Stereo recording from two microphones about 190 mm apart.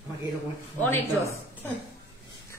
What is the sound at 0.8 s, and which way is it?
Speech, 10° left (ahead or behind).